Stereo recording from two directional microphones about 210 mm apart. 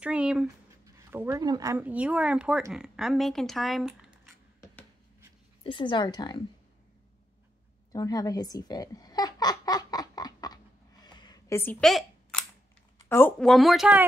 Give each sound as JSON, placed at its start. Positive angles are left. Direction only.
{"t": 0.0, "sound": "speech", "side_deg": -5}
{"t": 5.6, "sound": "speech", "side_deg": 25}
{"t": 7.9, "sound": "a sound", "side_deg": 15}
{"t": 13.1, "sound": "speech", "side_deg": 5}